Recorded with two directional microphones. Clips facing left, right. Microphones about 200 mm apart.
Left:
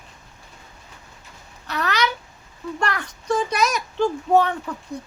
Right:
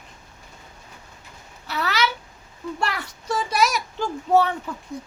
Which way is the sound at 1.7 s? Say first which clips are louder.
Left 1 dB; 5° right (ahead or behind).